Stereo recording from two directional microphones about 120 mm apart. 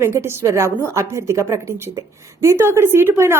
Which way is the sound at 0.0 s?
20° right (ahead or behind).